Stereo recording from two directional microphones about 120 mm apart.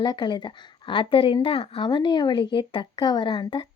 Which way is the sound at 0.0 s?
35° left (ahead or behind).